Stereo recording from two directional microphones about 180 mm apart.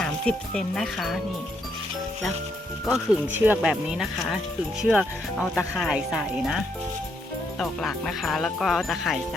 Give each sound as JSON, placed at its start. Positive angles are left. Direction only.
{"t": 0.0, "sound": "speech", "side_deg": 5}
{"t": 2.8, "sound": "speech", "side_deg": -5}
{"t": 7.6, "sound": "speech", "side_deg": 0}